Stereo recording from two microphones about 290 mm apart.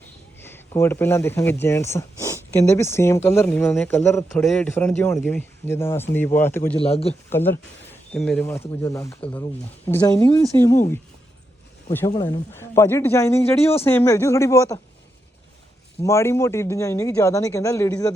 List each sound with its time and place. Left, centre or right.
0.4 s speech: centre
6.7 s speech: left
7.3 s speech: centre
11.9 s speech: centre
16.0 s speech: centre